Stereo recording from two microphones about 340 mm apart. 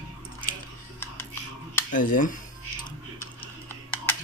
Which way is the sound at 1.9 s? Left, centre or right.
Left.